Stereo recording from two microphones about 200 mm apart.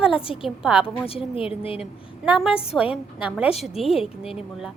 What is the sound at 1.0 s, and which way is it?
Speech, 30° left (ahead or behind).